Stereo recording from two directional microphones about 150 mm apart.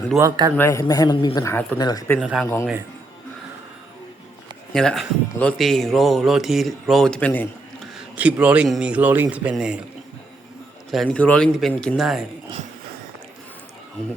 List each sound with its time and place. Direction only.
0.2 s a man's voice: 25° right (ahead or behind)
0.5 s a man's voice: 15° left (ahead or behind)
2.1 s speech: centre (ahead or behind)
4.7 s speech: 5° left (ahead or behind)
8.1 s speech: 10° right (ahead or behind)
10.9 s speech: 5° left (ahead or behind)